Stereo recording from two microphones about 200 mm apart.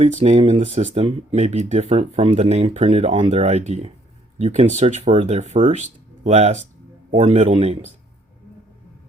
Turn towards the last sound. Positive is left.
turn(degrees=-30)  # may be behind; listen again after turning